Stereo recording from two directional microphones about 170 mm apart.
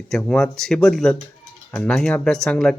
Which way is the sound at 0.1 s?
5° left (ahead or behind).